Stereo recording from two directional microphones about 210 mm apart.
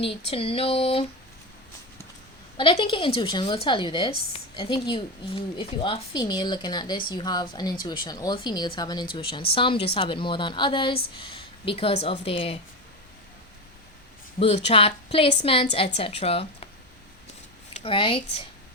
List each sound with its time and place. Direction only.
0.3 s speech: 25° left (ahead or behind)
2.8 s speech: 25° left (ahead or behind)
14.3 s speech: 30° left (ahead or behind)
17.7 s speech: 25° left (ahead or behind)